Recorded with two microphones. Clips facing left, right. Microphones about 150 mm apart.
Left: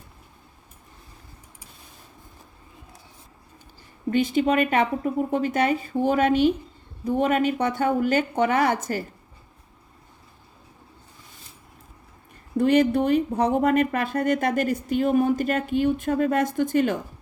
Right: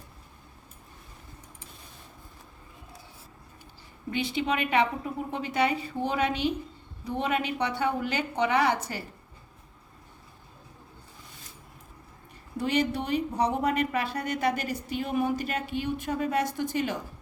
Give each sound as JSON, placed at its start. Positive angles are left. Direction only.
{"t": 4.1, "sound": "speech", "side_deg": 45}
{"t": 12.5, "sound": "speech", "side_deg": 50}